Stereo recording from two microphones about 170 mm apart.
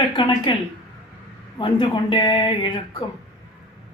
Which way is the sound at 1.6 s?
25° left (ahead or behind).